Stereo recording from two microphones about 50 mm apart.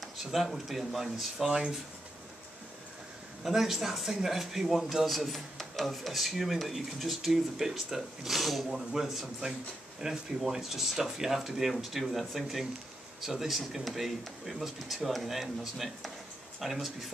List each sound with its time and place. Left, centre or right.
0.0 s speech: centre
3.4 s speech: centre